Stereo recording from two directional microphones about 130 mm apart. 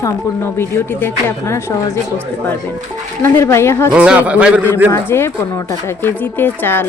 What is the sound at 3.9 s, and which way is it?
Speech, 10° right (ahead or behind).